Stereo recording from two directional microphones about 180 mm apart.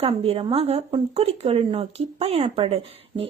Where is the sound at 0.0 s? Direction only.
35° right (ahead or behind).